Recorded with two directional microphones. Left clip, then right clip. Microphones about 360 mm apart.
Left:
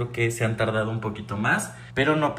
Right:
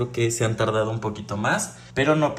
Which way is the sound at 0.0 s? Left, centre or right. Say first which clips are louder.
Right 2 dB; centre.